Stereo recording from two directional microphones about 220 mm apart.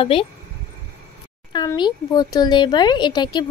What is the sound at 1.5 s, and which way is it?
A woman's voice, 20° left (ahead or behind).